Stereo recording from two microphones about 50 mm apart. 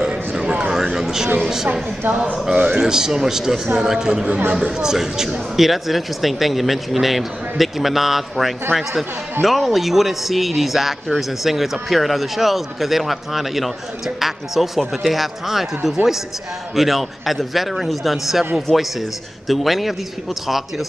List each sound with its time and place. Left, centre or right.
0.0 s a sound: centre
0.9 s speech: centre
2.0 s speech: right
2.5 s a man's voice: right
2.8 s speech: centre